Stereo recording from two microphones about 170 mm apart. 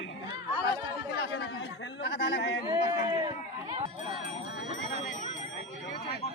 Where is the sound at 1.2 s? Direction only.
75° left (ahead or behind).